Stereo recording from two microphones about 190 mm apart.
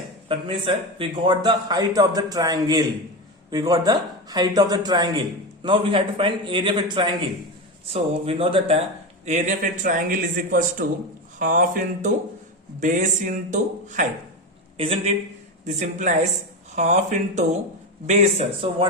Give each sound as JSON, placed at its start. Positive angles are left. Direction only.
{"t": 0.3, "sound": "a man's voice", "side_deg": -30}
{"t": 9.2, "sound": "a man's voice", "side_deg": -40}
{"t": 14.8, "sound": "a man's voice", "side_deg": -30}
{"t": 15.6, "sound": "speech", "side_deg": -40}